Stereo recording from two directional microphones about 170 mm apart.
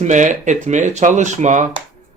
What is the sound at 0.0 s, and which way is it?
Speech, 45° right (ahead or behind).